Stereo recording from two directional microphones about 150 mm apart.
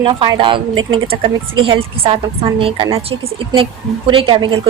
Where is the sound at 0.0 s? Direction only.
35° right (ahead or behind).